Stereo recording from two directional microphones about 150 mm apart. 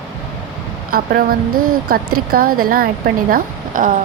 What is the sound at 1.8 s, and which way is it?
Speech, 80° right.